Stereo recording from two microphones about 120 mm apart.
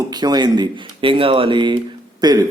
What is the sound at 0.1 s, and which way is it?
A man's voice, 35° right (ahead or behind).